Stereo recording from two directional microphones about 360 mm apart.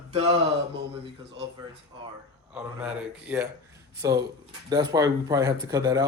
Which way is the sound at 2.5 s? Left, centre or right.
Centre.